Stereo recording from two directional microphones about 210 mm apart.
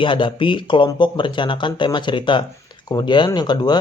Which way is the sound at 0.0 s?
25° left (ahead or behind).